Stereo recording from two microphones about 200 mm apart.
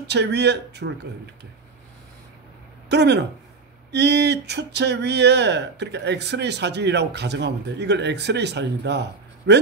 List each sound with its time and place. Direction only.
0.0 s speech: 55° right (ahead or behind)
2.9 s speech: 60° right (ahead or behind)